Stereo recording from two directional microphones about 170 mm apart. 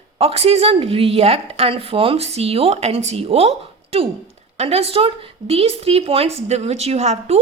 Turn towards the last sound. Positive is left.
turn(degrees=-40)  # may be behind; listen again after turning